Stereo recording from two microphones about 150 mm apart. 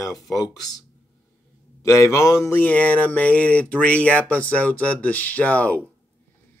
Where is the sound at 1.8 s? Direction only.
20° left (ahead or behind).